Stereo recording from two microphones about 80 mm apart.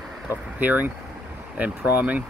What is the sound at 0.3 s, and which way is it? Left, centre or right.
Speech, right.